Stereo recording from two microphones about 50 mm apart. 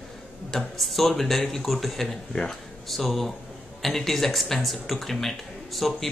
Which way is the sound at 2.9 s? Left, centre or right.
Centre.